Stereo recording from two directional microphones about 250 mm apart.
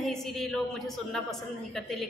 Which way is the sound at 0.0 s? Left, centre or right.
Centre.